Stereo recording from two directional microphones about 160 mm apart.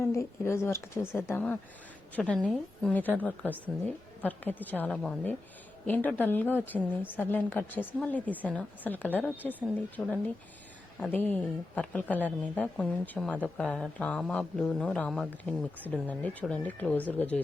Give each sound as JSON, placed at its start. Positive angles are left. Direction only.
{"t": 0.0, "sound": "a woman's voice", "side_deg": 20}